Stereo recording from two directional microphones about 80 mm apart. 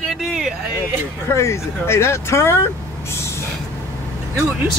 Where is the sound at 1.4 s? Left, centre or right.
Left.